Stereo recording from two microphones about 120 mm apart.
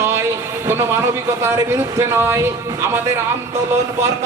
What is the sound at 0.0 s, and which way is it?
Speech, 20° right (ahead or behind).